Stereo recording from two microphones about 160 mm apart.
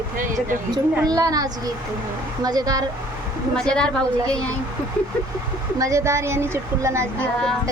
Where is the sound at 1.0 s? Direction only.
25° right (ahead or behind).